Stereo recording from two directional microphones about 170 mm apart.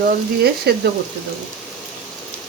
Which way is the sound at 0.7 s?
70° right (ahead or behind).